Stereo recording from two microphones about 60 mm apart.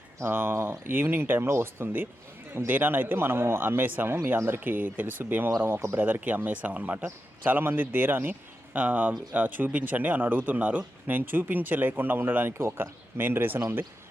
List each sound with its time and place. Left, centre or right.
0.2 s speech: right
6.1 s speech: right